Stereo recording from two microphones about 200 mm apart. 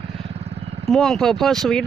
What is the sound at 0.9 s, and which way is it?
Speech, centre (ahead or behind).